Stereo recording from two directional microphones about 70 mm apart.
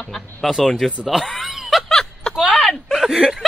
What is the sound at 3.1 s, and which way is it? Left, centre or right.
Speech, centre.